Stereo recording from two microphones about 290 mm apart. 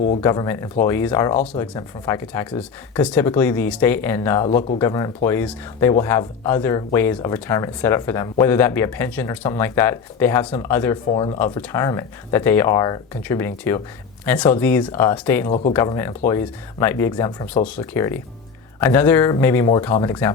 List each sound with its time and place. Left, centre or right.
0.2 s speech: centre
15.4 s speech: left
15.7 s speech: centre